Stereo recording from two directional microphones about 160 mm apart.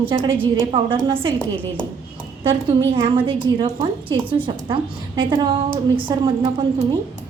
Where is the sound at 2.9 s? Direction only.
30° right (ahead or behind).